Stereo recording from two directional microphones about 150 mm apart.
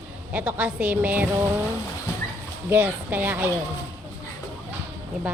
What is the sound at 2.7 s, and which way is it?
Speech, 15° right (ahead or behind).